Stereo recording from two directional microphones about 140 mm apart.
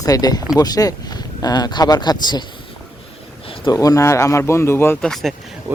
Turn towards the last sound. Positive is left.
turn(degrees=-10)  # may be behind; listen again after turning